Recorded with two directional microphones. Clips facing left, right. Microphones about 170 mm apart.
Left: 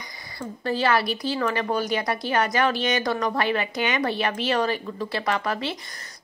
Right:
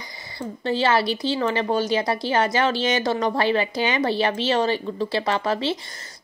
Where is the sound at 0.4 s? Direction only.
25° right (ahead or behind).